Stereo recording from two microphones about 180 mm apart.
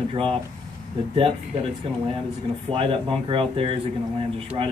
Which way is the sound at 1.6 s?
30° right (ahead or behind).